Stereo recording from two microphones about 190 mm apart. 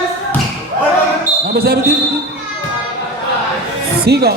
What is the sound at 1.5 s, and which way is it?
Speech, 55° right (ahead or behind).